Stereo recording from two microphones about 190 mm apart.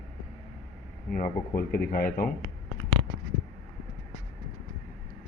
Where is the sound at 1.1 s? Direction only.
50° left (ahead or behind).